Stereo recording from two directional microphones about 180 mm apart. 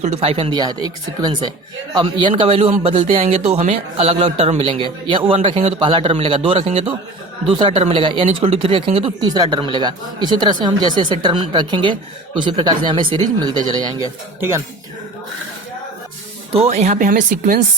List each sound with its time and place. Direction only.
0.0 s speech: 35° right (ahead or behind)
16.5 s speech: 35° right (ahead or behind)